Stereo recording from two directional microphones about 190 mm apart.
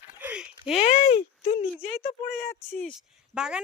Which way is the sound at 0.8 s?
30° left (ahead or behind).